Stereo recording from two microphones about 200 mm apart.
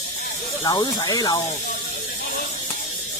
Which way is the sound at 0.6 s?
20° left (ahead or behind).